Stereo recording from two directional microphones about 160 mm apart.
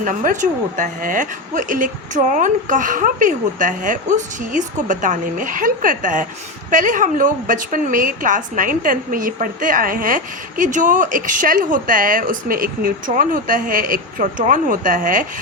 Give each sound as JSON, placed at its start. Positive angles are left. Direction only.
{"t": 0.0, "sound": "a woman's voice", "side_deg": -55}